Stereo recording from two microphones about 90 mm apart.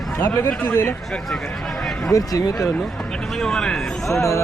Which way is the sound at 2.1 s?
40° left (ahead or behind).